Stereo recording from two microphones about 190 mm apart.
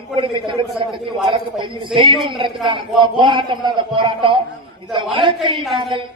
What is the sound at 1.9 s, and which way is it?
A man's voice, 25° right (ahead or behind).